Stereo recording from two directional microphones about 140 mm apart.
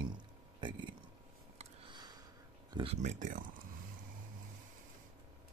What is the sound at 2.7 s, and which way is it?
Speech, 40° right (ahead or behind).